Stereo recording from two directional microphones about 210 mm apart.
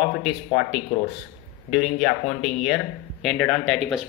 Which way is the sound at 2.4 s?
Centre (ahead or behind).